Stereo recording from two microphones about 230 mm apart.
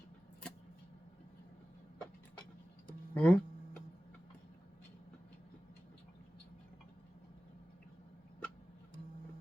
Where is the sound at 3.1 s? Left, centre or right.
Centre.